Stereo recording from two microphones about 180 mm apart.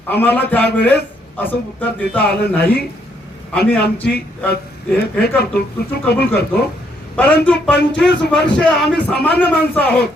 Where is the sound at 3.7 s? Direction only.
10° left (ahead or behind).